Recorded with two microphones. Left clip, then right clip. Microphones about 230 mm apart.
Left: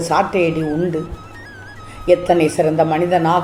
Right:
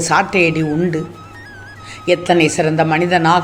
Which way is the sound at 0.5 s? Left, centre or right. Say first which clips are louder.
Right 2 dB; right.